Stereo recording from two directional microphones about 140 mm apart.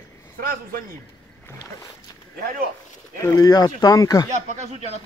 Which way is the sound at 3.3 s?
25° left (ahead or behind).